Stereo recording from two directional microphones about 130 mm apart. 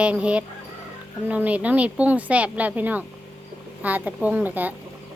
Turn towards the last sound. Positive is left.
turn(degrees=-15)  # may be behind; listen again after turning